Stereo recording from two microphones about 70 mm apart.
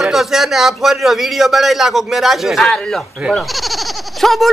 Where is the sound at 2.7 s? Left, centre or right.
Centre.